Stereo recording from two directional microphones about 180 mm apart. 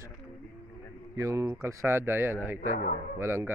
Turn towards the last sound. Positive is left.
turn(degrees=-15)  # may be behind; listen again after turning